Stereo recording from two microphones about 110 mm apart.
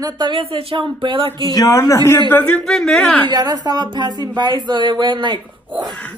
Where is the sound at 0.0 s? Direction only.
45° right (ahead or behind).